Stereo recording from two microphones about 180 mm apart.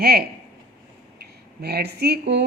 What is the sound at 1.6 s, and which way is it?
Speech, 65° right (ahead or behind).